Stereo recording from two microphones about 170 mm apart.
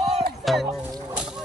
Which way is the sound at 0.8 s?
10° right (ahead or behind).